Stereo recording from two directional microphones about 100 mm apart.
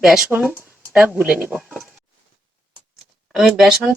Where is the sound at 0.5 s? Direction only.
20° right (ahead or behind).